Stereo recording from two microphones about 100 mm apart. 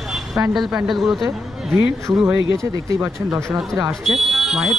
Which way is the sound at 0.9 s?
Centre (ahead or behind).